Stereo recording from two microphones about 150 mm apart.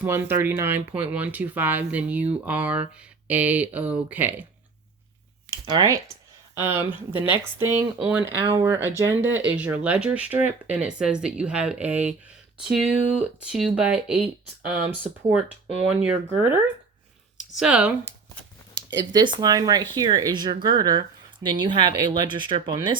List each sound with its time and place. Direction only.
0.0 s speech: 15° right (ahead or behind)
5.6 s speech: 25° right (ahead or behind)
6.5 s speech: 15° right (ahead or behind)
8.4 s speech: 35° right (ahead or behind)
8.6 s speech: 15° right (ahead or behind)
15.9 s speech: 10° right (ahead or behind)
18.9 s speech: 30° right (ahead or behind)